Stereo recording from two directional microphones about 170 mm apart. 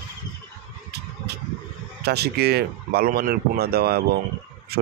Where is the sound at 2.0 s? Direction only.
75° right (ahead or behind).